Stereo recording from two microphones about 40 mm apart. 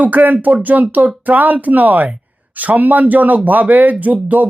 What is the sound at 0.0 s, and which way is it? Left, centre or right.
Speech, right.